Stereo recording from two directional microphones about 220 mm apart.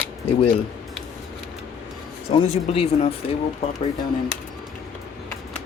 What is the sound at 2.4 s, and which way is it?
Speech, 30° left (ahead or behind).